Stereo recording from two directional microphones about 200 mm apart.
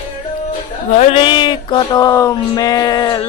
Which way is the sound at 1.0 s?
30° left (ahead or behind).